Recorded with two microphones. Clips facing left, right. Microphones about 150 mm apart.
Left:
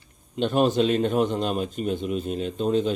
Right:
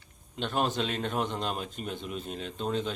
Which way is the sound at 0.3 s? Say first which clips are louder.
Left 9 dB; 15° left (ahead or behind).